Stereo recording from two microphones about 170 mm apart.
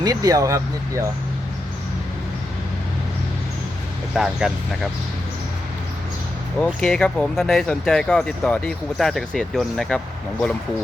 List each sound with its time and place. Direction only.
0.0 s speech: 20° right (ahead or behind)
4.1 s speech: 5° right (ahead or behind)
6.7 s speech: 5° left (ahead or behind)